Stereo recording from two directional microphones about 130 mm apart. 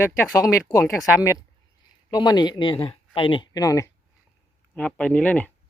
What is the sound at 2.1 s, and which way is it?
Speech, 30° left (ahead or behind).